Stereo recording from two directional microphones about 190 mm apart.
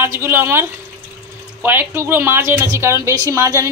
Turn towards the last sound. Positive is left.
turn(degrees=-15)  # may be behind; listen again after turning